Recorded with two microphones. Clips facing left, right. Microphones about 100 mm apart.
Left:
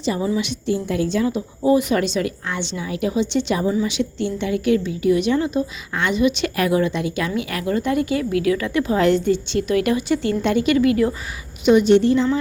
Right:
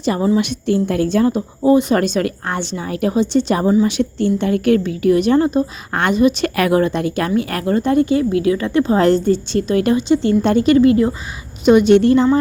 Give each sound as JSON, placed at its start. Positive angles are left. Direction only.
{"t": 0.0, "sound": "a woman's voice", "side_deg": -55}
{"t": 2.0, "sound": "a woman's voice", "side_deg": -50}
{"t": 6.6, "sound": "speech", "side_deg": -55}
{"t": 11.6, "sound": "a woman's voice", "side_deg": -55}